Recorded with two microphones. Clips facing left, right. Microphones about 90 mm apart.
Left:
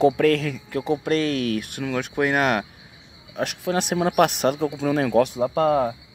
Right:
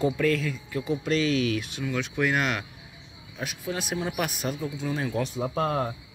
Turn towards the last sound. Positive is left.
turn(degrees=90)